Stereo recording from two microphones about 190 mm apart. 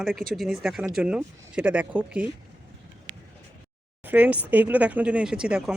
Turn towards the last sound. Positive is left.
turn(degrees=-5)  # may be behind; listen again after turning